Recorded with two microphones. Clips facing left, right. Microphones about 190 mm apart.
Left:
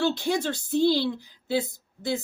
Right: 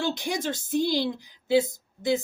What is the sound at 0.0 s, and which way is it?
Speech, 15° right (ahead or behind).